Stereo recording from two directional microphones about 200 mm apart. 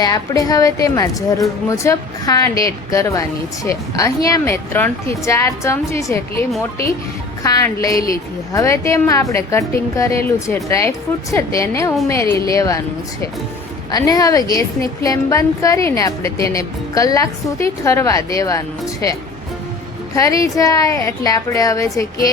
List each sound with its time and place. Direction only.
0.0 s a woman's voice: 20° left (ahead or behind)
13.9 s a woman's voice: 20° left (ahead or behind)
20.1 s a woman's voice: 15° left (ahead or behind)